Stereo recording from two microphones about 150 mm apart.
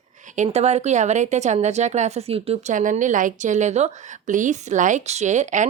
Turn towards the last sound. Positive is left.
turn(degrees=-55)  # may be behind; listen again after turning